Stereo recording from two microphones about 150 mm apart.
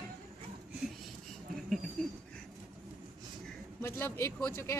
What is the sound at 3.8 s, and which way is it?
Speech, 15° left (ahead or behind).